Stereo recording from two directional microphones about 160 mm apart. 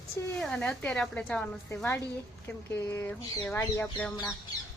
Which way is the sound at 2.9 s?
15° left (ahead or behind).